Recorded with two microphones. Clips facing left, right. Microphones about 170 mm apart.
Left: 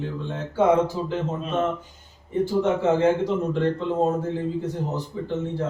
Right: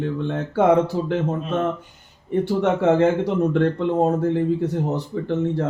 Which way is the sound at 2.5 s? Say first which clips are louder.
Right 3 dB; 65° right (ahead or behind).